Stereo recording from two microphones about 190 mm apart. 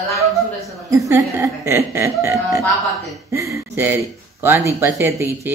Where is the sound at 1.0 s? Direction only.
15° right (ahead or behind).